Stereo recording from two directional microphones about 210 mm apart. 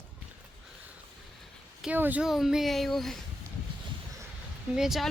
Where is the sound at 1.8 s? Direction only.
5° right (ahead or behind).